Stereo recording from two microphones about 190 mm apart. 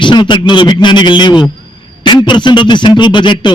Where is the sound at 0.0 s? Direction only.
25° left (ahead or behind).